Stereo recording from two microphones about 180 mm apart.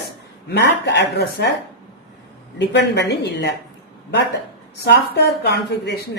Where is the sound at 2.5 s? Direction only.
70° left (ahead or behind).